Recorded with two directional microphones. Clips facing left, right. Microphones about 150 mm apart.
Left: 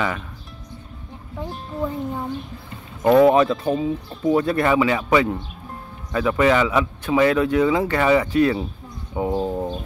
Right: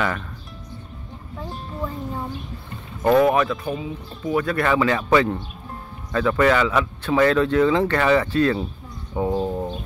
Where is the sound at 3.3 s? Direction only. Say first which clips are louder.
Left 4 dB; 30° left (ahead or behind); by 9.6 s 10° left (ahead or behind).